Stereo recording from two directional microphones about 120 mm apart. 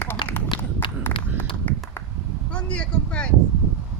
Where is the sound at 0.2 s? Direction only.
40° left (ahead or behind).